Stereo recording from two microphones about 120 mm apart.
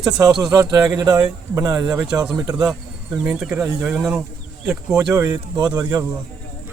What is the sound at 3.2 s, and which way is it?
Speech, 5° right (ahead or behind).